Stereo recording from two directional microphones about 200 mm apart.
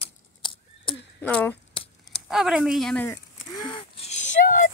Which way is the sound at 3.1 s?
20° left (ahead or behind).